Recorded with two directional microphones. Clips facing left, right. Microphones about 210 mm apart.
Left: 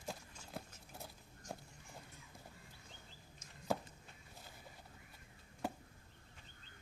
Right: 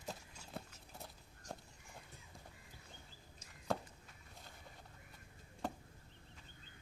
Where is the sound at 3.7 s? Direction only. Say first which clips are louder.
Left 1 dB; 5° left (ahead or behind).